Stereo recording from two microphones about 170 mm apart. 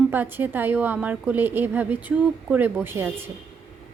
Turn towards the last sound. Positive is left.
turn(degrees=-15)  # may be behind; listen again after turning